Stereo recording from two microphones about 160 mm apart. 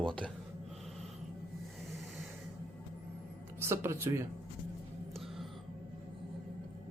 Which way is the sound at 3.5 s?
15° right (ahead or behind).